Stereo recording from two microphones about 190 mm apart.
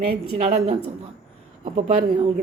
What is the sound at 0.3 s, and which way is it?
Speech, 30° right (ahead or behind).